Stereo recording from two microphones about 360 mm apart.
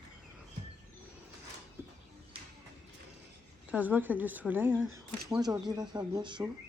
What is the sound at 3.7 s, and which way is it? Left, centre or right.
A woman's voice, centre.